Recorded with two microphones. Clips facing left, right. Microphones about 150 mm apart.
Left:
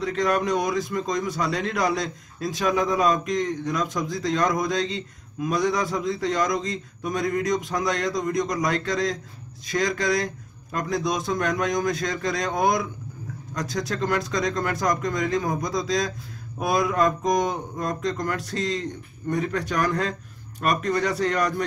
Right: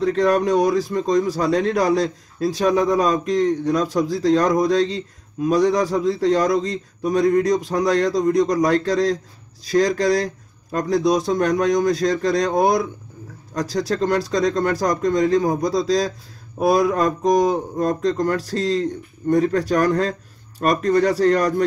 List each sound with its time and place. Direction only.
0.0 s a man's voice: 35° right (ahead or behind)